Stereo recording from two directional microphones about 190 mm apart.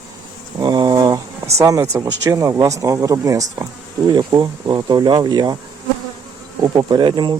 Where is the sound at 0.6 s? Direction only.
20° right (ahead or behind).